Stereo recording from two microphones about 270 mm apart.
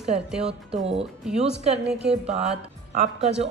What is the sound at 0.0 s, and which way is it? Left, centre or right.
Speech, centre.